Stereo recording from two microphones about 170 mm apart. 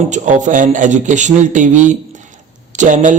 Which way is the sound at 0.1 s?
45° right (ahead or behind).